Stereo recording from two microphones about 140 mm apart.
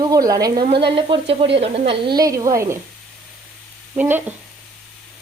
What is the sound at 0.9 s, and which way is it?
Speech, 40° right (ahead or behind).